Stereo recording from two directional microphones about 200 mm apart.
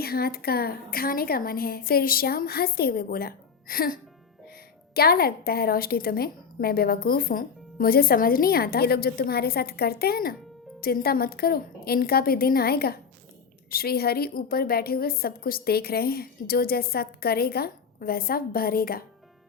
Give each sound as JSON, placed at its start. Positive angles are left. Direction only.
{"t": 0.0, "sound": "a woman's voice", "side_deg": 50}
{"t": 4.9, "sound": "a woman's voice", "side_deg": 50}